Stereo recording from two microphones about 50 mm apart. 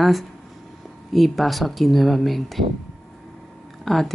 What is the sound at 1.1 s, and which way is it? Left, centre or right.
Speech, centre.